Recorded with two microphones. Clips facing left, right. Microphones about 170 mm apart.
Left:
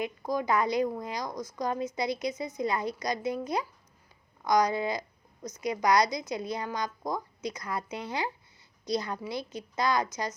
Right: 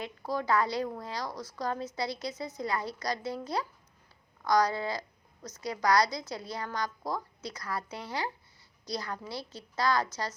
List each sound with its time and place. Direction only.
0.0 s a woman's voice: 15° left (ahead or behind)